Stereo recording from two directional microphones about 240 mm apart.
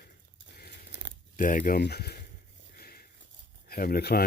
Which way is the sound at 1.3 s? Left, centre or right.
Left.